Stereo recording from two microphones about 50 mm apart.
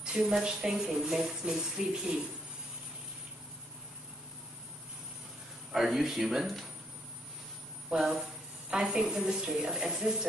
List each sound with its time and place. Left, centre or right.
0.0 s speech: centre
5.7 s speech: centre
7.9 s speech: centre